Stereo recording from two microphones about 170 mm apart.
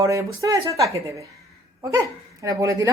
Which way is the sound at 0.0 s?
20° right (ahead or behind).